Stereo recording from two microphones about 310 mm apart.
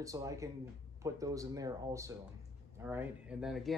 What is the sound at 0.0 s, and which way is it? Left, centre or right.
Speech, centre.